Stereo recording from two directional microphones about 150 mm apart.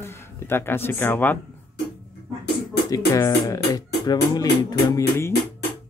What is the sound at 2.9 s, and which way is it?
Speech, 20° left (ahead or behind).